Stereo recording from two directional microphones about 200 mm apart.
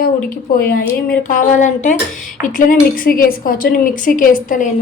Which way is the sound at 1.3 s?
40° left (ahead or behind).